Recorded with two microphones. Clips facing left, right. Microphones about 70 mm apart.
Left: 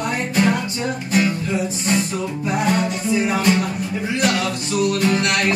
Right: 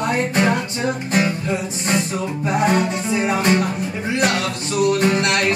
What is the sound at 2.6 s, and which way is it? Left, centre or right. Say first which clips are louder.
Music: right 1 dB; right.